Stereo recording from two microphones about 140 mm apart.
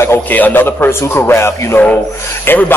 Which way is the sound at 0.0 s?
15° left (ahead or behind).